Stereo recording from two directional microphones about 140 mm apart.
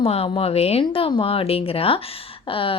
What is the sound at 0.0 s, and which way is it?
A woman's voice, 45° left (ahead or behind).